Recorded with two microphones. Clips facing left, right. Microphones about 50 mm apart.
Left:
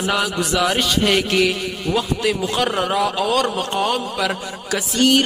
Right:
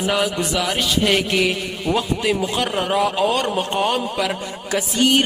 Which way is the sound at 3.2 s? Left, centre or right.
Right.